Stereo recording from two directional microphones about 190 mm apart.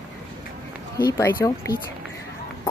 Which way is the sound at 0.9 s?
15° left (ahead or behind).